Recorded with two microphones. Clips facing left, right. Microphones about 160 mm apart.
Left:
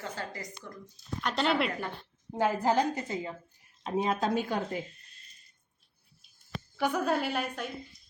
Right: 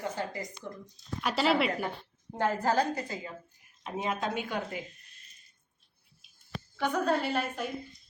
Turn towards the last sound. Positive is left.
turn(degrees=0)  # may be behind; listen again after turning